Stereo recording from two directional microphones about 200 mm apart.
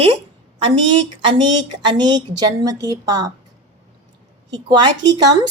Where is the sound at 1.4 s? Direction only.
20° right (ahead or behind).